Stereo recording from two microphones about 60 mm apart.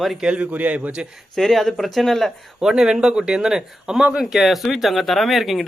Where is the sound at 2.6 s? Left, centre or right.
Centre.